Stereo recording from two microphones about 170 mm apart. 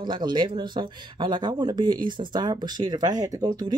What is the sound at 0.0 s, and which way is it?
Speech, 25° right (ahead or behind).